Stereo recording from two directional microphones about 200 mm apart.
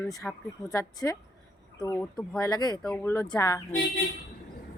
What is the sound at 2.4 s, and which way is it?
Speech, 20° left (ahead or behind).